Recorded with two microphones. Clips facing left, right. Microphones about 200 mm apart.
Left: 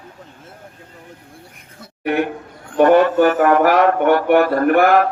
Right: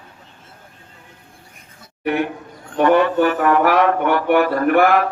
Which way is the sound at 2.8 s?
40° left (ahead or behind).